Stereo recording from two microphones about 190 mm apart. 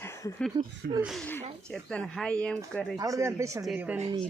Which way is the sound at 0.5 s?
25° right (ahead or behind).